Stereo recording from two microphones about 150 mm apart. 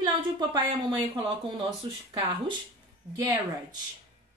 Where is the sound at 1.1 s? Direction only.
35° right (ahead or behind).